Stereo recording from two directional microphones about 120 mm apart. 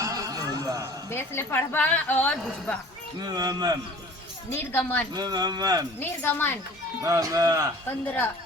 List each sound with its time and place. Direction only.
0.0 s a sound: 30° right (ahead or behind)
1.1 s a woman's voice: 20° left (ahead or behind)
3.2 s speech: 35° right (ahead or behind)
4.4 s a woman's voice: 20° left (ahead or behind)
5.1 s speech: 35° right (ahead or behind)
6.0 s a woman's voice: 15° left (ahead or behind)
7.0 s speech: 25° right (ahead or behind)
8.0 s a woman's voice: 15° left (ahead or behind)